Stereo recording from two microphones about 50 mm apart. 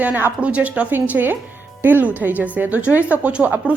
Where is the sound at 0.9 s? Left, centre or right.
Right.